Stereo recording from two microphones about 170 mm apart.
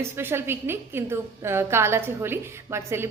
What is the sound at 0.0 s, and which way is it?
A woman's voice, 15° right (ahead or behind).